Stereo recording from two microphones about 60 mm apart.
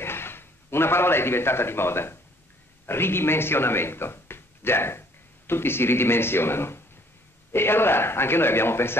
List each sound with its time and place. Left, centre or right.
0.0 s a man's voice: left